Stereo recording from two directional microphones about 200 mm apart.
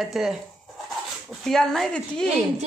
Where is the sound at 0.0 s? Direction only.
Centre (ahead or behind).